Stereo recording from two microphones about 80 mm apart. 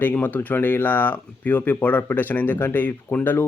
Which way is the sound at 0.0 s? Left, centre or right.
Left.